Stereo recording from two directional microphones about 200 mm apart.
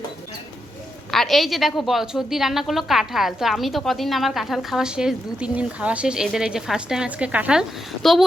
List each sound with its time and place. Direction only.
1.1 s a woman's voice: centre (ahead or behind)